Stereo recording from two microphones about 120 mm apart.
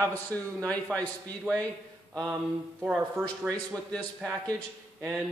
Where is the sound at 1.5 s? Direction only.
5° right (ahead or behind).